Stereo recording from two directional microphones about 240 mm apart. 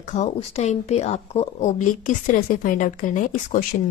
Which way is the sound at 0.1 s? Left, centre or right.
Left.